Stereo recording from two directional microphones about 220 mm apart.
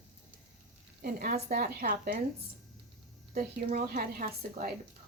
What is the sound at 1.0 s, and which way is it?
A woman's voice, 40° right (ahead or behind).